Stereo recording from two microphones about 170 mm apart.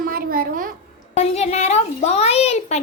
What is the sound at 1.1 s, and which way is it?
A child's voice, 40° left (ahead or behind).